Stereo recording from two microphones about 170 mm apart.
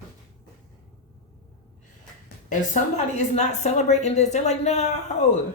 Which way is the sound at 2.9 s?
40° left (ahead or behind).